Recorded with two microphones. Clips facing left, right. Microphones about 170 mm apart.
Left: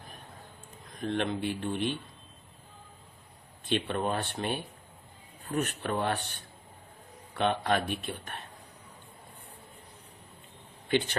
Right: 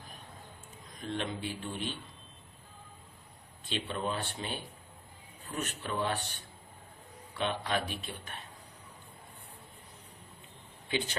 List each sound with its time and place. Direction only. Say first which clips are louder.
1.0 s speech: left 6 dB; 60° left (ahead or behind)
3.7 s speech: left 5 dB; 55° left (ahead or behind)
7.3 s speech: left 5 dB; 55° left (ahead or behind)